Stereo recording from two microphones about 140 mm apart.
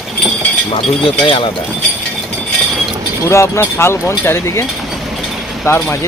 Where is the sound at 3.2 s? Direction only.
20° left (ahead or behind).